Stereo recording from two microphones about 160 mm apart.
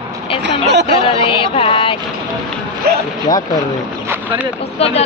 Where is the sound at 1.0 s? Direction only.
35° left (ahead or behind).